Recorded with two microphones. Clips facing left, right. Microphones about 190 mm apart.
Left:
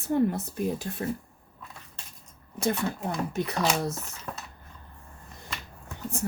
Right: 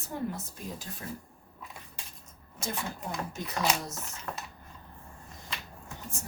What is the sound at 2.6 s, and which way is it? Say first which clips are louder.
Speech: left 8 dB; 60° left (ahead or behind).